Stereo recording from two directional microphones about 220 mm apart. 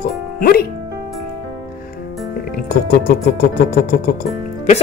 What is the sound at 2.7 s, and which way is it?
Speech, 45° left (ahead or behind).